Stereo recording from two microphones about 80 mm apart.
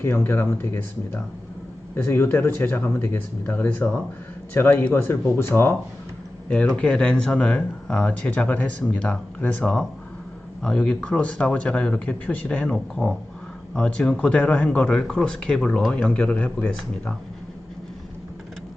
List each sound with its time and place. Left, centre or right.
0.0 s speech: left
6.7 s speech: centre